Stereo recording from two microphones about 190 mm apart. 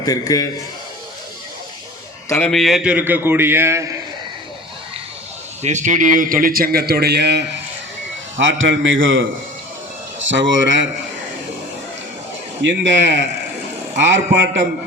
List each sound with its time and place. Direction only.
0.0 s a man's voice: 20° left (ahead or behind)
2.3 s a man's voice: 5° left (ahead or behind); by 3.9 s 15° right (ahead or behind)
5.6 s a man's voice: 40° right (ahead or behind); by 7.4 s 60° right (ahead or behind)
8.4 s a man's voice: 80° right
10.2 s speech: 80° right
12.6 s speech: 70° right (ahead or behind)